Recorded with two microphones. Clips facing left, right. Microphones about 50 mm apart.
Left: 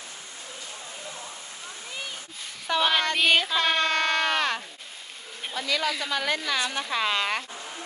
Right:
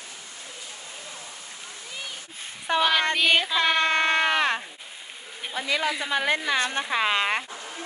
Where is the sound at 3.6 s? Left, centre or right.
Right.